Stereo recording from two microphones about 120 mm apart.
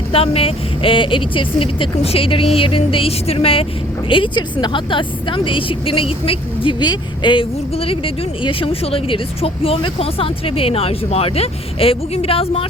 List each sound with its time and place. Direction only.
0.1 s a woman's voice: 55° left (ahead or behind)